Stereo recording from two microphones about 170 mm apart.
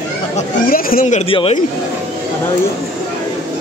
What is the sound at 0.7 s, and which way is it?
Speech, 60° left (ahead or behind).